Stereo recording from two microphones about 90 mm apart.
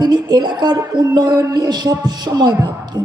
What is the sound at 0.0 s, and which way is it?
A man's voice, 50° right (ahead or behind).